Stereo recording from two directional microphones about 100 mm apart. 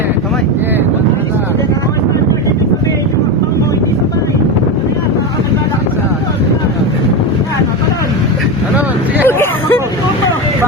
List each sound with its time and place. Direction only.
9.2 s hubbub: 25° left (ahead or behind)